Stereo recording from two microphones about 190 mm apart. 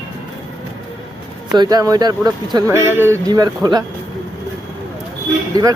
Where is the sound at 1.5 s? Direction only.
20° right (ahead or behind).